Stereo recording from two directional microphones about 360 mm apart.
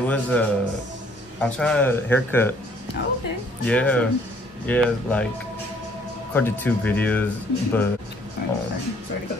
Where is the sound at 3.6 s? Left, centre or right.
Centre.